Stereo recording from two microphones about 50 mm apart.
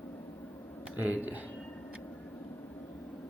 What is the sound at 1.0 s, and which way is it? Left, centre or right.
Speech, right.